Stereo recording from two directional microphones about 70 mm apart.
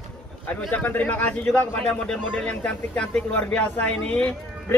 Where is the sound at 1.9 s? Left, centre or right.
Centre.